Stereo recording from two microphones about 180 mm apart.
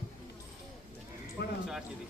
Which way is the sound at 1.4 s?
75° left (ahead or behind).